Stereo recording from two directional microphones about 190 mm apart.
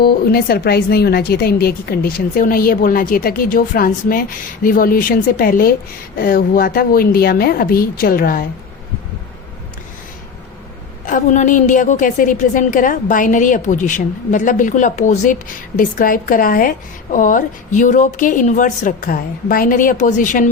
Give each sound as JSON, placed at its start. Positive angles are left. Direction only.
{"t": 0.0, "sound": "speech", "side_deg": 55}
{"t": 11.0, "sound": "speech", "side_deg": 40}